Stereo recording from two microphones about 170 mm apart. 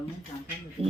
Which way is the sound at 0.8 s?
35° right (ahead or behind).